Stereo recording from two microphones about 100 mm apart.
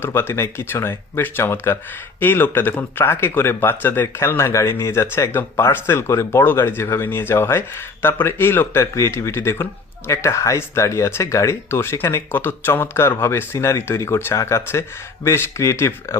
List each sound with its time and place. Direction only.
0.0 s speech: 25° left (ahead or behind)